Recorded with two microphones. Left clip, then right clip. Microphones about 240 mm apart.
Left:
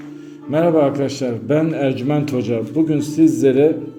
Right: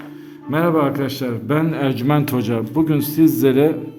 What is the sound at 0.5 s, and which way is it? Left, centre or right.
A man's voice, centre.